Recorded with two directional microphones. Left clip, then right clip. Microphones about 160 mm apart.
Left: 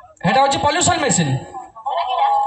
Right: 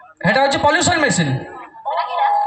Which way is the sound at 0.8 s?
25° left (ahead or behind).